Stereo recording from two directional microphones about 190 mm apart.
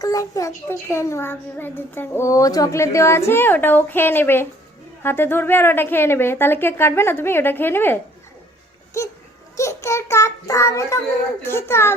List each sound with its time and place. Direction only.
0.0 s a child's voice: 15° left (ahead or behind)
8.9 s speech: 15° left (ahead or behind)
9.6 s child singing: 15° left (ahead or behind)
11.4 s a child's voice: 15° left (ahead or behind)